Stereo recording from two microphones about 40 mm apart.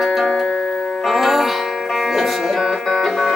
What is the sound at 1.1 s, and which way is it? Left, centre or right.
Music, centre.